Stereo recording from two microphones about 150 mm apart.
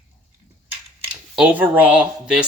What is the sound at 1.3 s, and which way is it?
Speech, 10° right (ahead or behind).